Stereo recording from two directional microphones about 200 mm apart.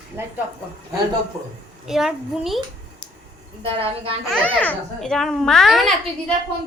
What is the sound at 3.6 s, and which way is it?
Speech, 25° right (ahead or behind).